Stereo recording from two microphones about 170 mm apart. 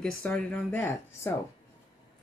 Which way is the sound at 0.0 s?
5° left (ahead or behind).